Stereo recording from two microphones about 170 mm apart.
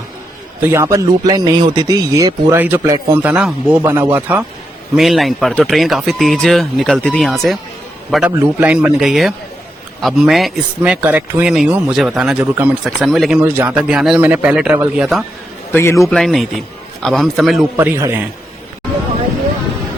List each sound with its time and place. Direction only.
0.7 s speech: 15° right (ahead or behind); by 13.4 s centre (ahead or behind)
13.4 s speech: 15° right (ahead or behind)
15.7 s a man's voice: 15° left (ahead or behind)
16.0 s speech: centre (ahead or behind)
17.7 s speech: 15° right (ahead or behind)